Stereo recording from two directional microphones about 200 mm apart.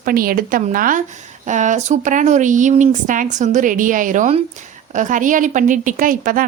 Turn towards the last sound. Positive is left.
turn(degrees=-45)  # may be behind; listen again after turning